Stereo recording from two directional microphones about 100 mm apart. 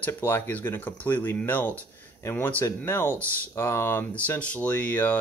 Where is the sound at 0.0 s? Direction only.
20° left (ahead or behind).